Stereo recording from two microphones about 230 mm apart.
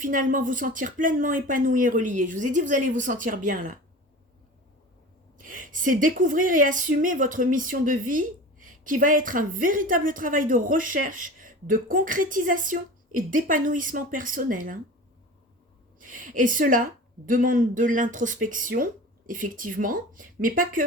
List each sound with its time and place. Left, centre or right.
0.0 s speech: right
5.5 s speech: right
16.0 s speech: right